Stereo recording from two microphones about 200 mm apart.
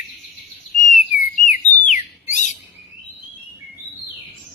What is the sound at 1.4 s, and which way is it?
Bird, 40° left (ahead or behind).